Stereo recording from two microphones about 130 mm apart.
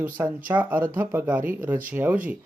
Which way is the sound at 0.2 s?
15° right (ahead or behind).